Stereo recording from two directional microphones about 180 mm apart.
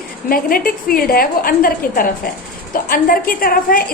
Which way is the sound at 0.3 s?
55° left (ahead or behind).